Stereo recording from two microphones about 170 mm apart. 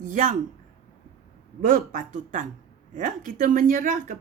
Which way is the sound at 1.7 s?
55° right (ahead or behind).